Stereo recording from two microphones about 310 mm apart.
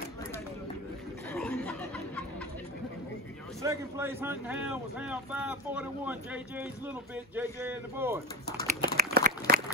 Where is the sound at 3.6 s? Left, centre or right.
Centre.